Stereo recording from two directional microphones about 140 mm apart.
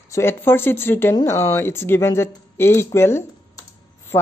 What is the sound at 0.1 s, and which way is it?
Speech, 15° left (ahead or behind).